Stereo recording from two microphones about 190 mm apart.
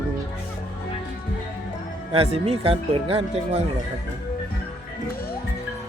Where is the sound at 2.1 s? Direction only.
30° right (ahead or behind).